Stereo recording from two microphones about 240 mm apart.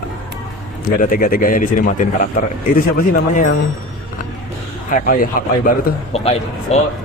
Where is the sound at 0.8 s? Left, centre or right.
Left.